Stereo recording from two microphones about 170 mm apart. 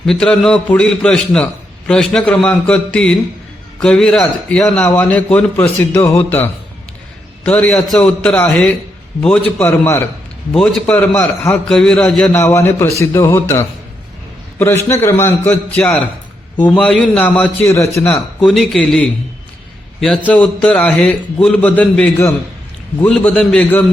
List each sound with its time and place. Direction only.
0.0 s a man's voice: 5° left (ahead or behind)
14.8 s a man's voice: 15° left (ahead or behind)
18.4 s a man's voice: centre (ahead or behind)